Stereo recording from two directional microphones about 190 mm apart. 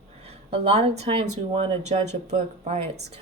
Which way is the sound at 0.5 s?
35° right (ahead or behind).